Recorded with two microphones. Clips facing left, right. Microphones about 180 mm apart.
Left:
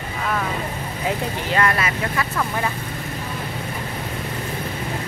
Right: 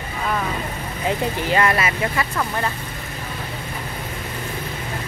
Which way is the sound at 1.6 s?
10° right (ahead or behind).